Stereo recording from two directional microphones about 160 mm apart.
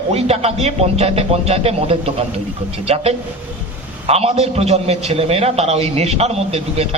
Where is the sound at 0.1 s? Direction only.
40° right (ahead or behind).